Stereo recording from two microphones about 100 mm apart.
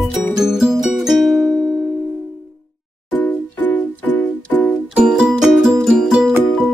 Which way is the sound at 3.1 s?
15° left (ahead or behind).